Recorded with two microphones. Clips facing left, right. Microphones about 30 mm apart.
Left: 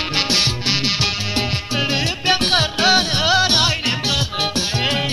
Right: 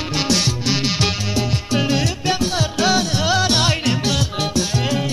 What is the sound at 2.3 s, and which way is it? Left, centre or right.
Music, left.